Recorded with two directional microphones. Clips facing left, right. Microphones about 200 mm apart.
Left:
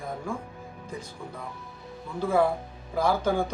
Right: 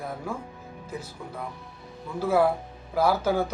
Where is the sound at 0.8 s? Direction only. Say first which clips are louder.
Right 2 dB; 5° right (ahead or behind).